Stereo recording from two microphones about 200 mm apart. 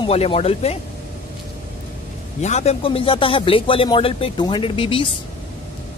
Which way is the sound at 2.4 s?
35° left (ahead or behind).